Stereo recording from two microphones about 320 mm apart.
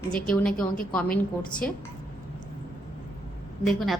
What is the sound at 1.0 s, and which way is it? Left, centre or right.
Speech, left.